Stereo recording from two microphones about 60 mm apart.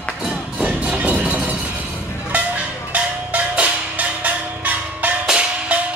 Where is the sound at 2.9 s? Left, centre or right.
Right.